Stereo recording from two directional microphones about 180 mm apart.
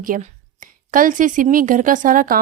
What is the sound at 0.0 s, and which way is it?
A woman's voice, 45° right (ahead or behind).